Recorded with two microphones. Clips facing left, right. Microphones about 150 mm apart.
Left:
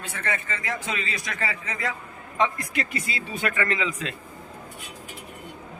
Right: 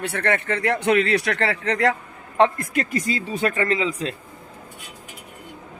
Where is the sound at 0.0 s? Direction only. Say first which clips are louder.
Right 8 dB; 70° right (ahead or behind).